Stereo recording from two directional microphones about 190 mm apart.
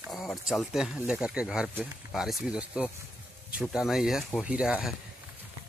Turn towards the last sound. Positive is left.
turn(degrees=-5)  # may be behind; listen again after turning